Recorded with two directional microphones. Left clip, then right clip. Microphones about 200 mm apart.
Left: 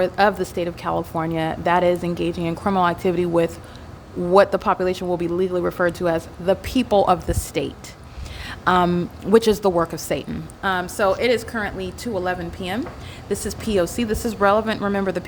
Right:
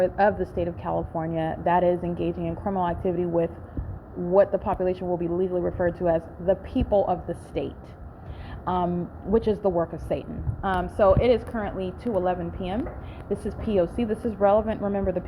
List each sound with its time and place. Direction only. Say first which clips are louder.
0.0 s speech: left 3 dB; 20° left (ahead or behind)
10.6 s a woman's voice: left 1 dB; 10° left (ahead or behind); by 15.2 s 25° left (ahead or behind)